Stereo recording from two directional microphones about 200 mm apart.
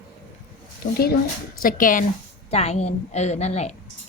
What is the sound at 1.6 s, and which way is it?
A woman's voice, 40° left (ahead or behind).